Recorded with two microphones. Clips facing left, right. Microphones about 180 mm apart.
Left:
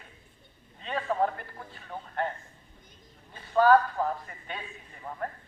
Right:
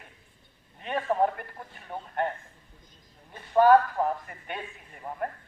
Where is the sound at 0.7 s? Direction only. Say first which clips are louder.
Right 2 dB; 20° right (ahead or behind).